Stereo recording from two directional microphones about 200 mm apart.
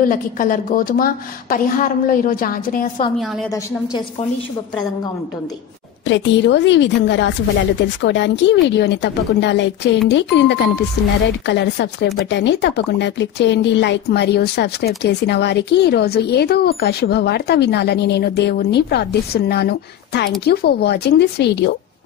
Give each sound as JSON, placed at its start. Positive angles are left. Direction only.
{"t": 0.0, "sound": "a woman's voice", "side_deg": 45}
{"t": 3.2, "sound": "a woman's voice", "side_deg": 0}
{"t": 6.0, "sound": "speech", "side_deg": 65}